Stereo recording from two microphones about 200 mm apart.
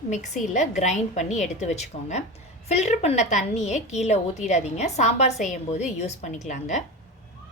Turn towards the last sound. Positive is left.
turn(degrees=35)  # may be behind; listen again after turning